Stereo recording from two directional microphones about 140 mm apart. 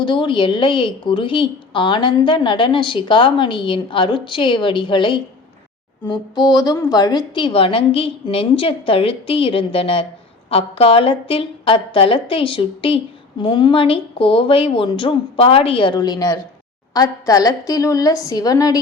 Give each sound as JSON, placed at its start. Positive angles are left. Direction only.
{"t": 0.0, "sound": "a woman's voice", "side_deg": 35}